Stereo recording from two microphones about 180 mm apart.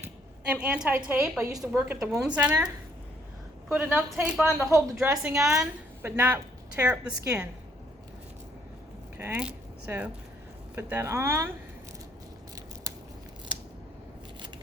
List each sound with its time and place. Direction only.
0.5 s speech: 5° right (ahead or behind)
3.7 s a woman's voice: 5° right (ahead or behind)
4.9 s a woman's voice: 5° right (ahead or behind)
9.1 s speech: 10° right (ahead or behind)
12.9 s scissors: 20° right (ahead or behind)